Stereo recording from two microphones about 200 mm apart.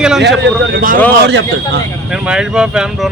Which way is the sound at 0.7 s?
45° right (ahead or behind).